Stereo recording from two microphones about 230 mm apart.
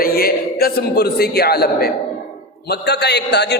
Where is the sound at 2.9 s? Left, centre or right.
Left.